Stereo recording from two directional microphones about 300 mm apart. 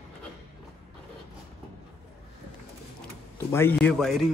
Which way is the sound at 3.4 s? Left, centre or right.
Centre.